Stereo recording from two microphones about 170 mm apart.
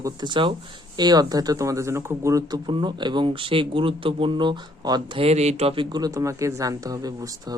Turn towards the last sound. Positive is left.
turn(degrees=-20)  # may be behind; listen again after turning